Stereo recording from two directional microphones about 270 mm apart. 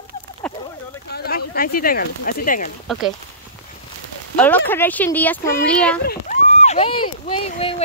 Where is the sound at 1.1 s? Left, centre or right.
Left.